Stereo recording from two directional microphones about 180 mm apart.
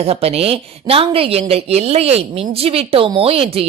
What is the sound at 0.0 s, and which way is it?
A woman's voice, 35° right (ahead or behind).